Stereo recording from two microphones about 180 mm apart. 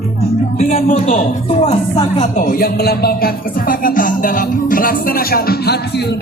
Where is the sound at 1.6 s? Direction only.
35° left (ahead or behind).